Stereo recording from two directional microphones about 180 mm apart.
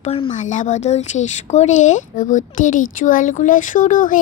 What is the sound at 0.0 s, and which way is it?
Speech, 35° left (ahead or behind).